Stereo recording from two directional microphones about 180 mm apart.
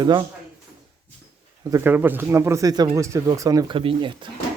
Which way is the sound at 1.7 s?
10° right (ahead or behind).